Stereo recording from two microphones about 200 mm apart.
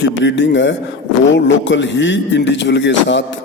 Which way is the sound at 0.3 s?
65° left (ahead or behind).